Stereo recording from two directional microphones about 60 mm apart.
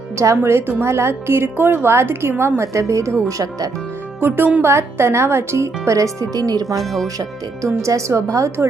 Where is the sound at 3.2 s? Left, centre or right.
Right.